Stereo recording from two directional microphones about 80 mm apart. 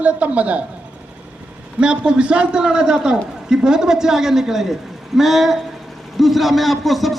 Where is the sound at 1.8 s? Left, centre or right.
Centre.